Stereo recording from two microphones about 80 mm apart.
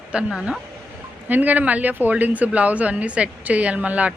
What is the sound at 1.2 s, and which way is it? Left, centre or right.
A woman's voice, right.